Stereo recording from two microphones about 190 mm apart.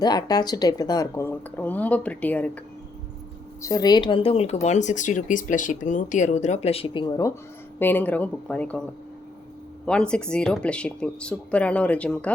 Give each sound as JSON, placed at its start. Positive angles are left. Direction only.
{"t": 0.0, "sound": "speech", "side_deg": 20}
{"t": 3.6, "sound": "a woman's voice", "side_deg": 20}
{"t": 9.8, "sound": "speech", "side_deg": 5}